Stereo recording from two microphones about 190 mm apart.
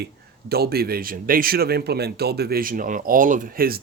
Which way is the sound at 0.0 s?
55° right (ahead or behind).